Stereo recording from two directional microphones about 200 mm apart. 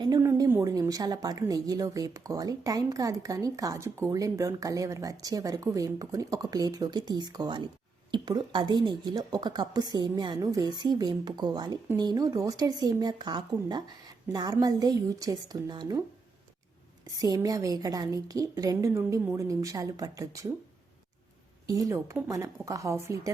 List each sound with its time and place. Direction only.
0.0 s a woman's voice: 15° right (ahead or behind)
17.1 s a woman's voice: 20° right (ahead or behind)
21.7 s a woman's voice: 15° right (ahead or behind)